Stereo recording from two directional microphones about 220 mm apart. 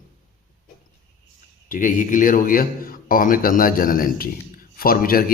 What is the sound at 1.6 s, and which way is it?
Speech, 35° left (ahead or behind).